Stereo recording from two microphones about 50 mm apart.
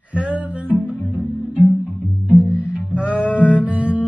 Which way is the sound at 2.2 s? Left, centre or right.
Right.